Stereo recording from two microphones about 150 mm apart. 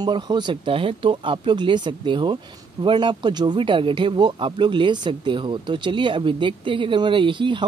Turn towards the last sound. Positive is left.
turn(degrees=-35)  # may be behind; listen again after turning